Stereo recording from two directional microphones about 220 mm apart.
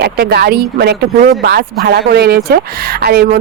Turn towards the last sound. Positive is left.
turn(degrees=-45)  # may be behind; listen again after turning